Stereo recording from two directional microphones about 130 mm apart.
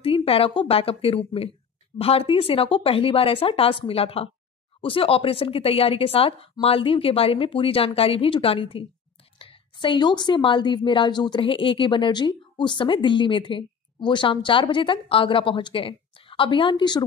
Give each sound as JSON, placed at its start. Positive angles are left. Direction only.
{"t": 0.0, "sound": "a woman's voice", "side_deg": 45}